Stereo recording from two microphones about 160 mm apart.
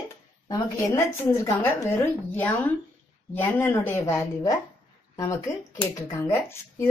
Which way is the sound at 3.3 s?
15° left (ahead or behind).